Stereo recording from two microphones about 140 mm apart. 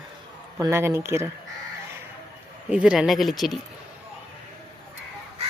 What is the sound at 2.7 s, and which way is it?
Speech, 5° right (ahead or behind).